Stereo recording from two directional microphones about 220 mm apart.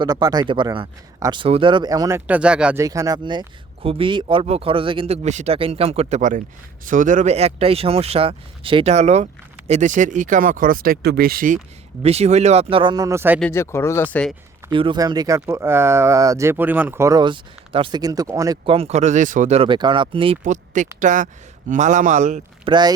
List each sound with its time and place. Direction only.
0.0 s speech: 15° right (ahead or behind); by 11.6 s 40° right (ahead or behind)
12.0 s speech: 30° right (ahead or behind); by 13.4 s 10° right (ahead or behind)
13.4 s speech: 10° left (ahead or behind)
14.7 s speech: 20° right (ahead or behind)